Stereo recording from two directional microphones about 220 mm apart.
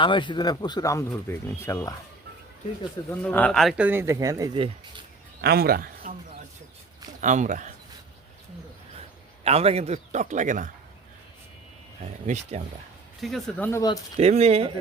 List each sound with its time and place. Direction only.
0.0 s speech: 20° left (ahead or behind)
3.1 s speech: 5° left (ahead or behind); by 5.0 s 20° right (ahead or behind)
5.4 s a man's voice: 45° right (ahead or behind)
7.2 s a man's voice: 35° right (ahead or behind)
9.4 s a man's voice: 30° right (ahead or behind)
12.2 s a man's voice: 30° right (ahead or behind)
13.2 s speech: centre (ahead or behind)
13.7 s speech: 15° left (ahead or behind)
14.2 s speech: 30° right (ahead or behind)